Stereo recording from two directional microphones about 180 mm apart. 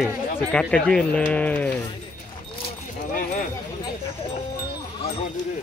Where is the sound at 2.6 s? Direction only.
50° left (ahead or behind).